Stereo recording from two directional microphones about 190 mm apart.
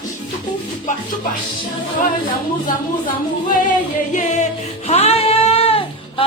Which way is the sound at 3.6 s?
40° left (ahead or behind).